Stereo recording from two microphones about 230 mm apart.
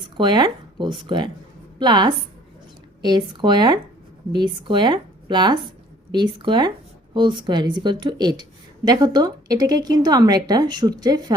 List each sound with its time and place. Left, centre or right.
0.2 s speech: centre